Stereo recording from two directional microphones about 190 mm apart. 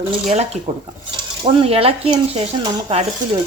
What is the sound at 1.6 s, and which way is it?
Speech, 30° right (ahead or behind).